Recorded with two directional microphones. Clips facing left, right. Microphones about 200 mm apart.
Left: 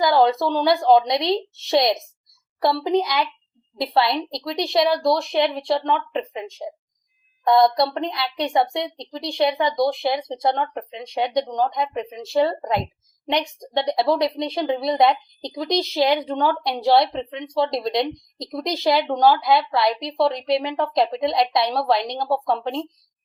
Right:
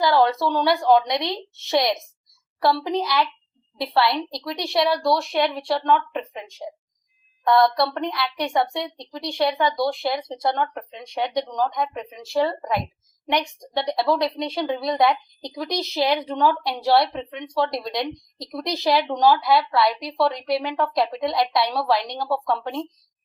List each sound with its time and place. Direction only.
0.1 s a woman's voice: 15° left (ahead or behind)